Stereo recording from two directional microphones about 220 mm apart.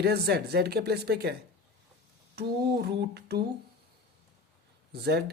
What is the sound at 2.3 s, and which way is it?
A man's voice, 45° right (ahead or behind).